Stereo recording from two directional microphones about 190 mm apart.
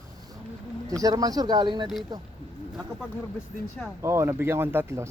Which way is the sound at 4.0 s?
15° right (ahead or behind).